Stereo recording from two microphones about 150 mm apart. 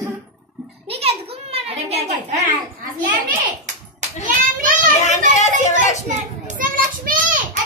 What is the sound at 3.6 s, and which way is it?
A child's voice, 55° right (ahead or behind).